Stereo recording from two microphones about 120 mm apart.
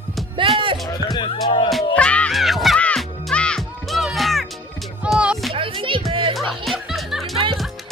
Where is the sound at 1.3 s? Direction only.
45° left (ahead or behind).